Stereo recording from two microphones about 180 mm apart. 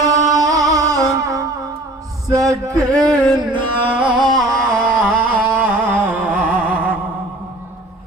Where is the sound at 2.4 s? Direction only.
20° right (ahead or behind).